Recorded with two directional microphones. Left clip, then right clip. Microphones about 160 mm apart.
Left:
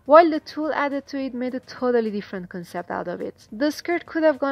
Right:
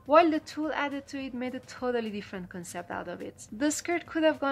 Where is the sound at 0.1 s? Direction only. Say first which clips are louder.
Left 8 dB; 30° left (ahead or behind).